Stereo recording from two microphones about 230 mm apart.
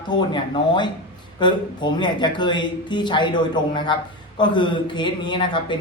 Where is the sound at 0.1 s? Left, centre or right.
Centre.